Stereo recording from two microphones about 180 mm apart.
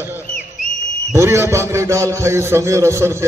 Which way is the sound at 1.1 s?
15° right (ahead or behind).